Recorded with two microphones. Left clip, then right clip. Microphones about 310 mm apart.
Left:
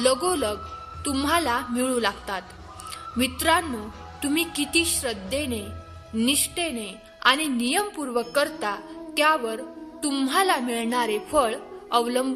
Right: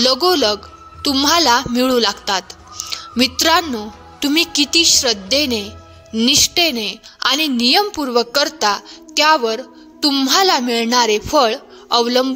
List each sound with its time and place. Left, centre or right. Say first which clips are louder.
0.0 s a woman's voice: right 9 dB; right